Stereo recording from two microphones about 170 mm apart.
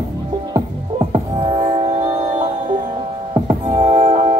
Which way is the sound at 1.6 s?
40° right (ahead or behind).